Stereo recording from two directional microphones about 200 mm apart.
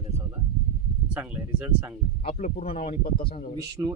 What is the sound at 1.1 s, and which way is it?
Speech, 10° right (ahead or behind).